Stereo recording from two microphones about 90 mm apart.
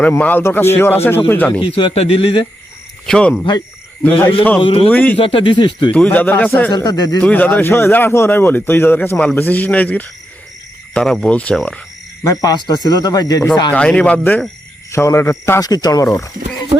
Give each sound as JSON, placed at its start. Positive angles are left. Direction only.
{"t": 0.0, "sound": "speech", "side_deg": 15}
{"t": 1.6, "sound": "a man's voice", "side_deg": 85}
{"t": 3.1, "sound": "speech", "side_deg": 10}
{"t": 4.6, "sound": "a man's voice", "side_deg": 80}
{"t": 4.9, "sound": "speech", "side_deg": 20}
{"t": 5.2, "sound": "speech", "side_deg": 80}
{"t": 5.9, "sound": "speech", "side_deg": 15}
{"t": 6.7, "sound": "speech", "side_deg": 50}
{"t": 7.2, "sound": "speech", "side_deg": 15}
{"t": 12.2, "sound": "speech", "side_deg": 40}
{"t": 13.7, "sound": "speech", "side_deg": 10}
{"t": 14.9, "sound": "a man's voice", "side_deg": 30}
{"t": 15.6, "sound": "speech", "side_deg": 45}